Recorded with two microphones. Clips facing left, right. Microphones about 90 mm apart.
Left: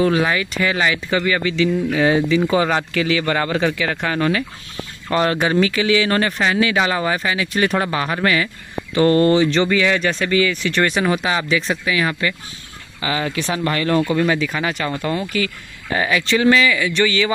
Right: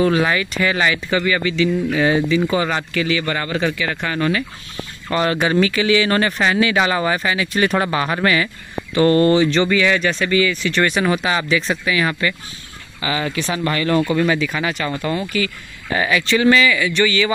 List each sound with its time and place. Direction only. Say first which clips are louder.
0.0 s speech: right 1 dB; 5° left (ahead or behind)
1.2 s speech: even; 45° left (ahead or behind)
2.0 s speech: left 1 dB; 90° left
5.1 s speech: left 1 dB; 45° left (ahead or behind)
5.4 s speech: even; 20° left (ahead or behind); by 8.5 s 10° right (ahead or behind)
8.9 s speech: even; 20° left (ahead or behind); by 10.8 s 60° left (ahead or behind)
10.8 s speech: even; 30° left (ahead or behind)
11.1 s speech: even; 15° left (ahead or behind)
13.0 s speech: even; 45° left (ahead or behind)
15.9 s speech: right 1 dB; 25° left (ahead or behind)